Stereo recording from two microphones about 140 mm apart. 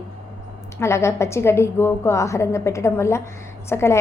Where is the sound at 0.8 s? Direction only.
20° left (ahead or behind).